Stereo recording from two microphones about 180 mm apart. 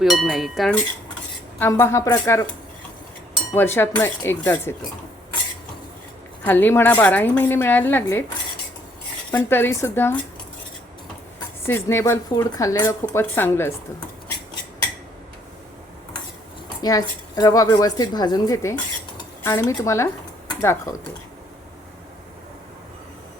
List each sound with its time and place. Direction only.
0.0 s cowbell: centre (ahead or behind)
1.5 s speech: 15° left (ahead or behind)
3.5 s speech: 10° left (ahead or behind)
6.4 s speech: 10° left (ahead or behind)
9.3 s speech: 10° left (ahead or behind)
11.6 s speech: 15° left (ahead or behind)
16.8 s a woman's voice: 20° left (ahead or behind)